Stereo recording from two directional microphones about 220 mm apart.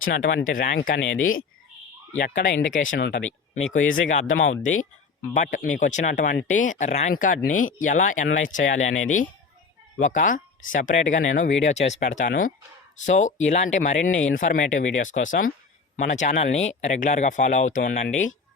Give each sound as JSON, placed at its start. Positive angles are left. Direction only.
{"t": 0.1, "sound": "speech", "side_deg": 40}
{"t": 0.8, "sound": "speech", "side_deg": 55}
{"t": 2.1, "sound": "speech", "side_deg": 40}
{"t": 2.9, "sound": "speech", "side_deg": 55}
{"t": 5.3, "sound": "speech", "side_deg": 35}